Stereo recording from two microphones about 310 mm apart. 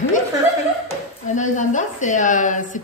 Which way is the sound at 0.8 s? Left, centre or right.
Left.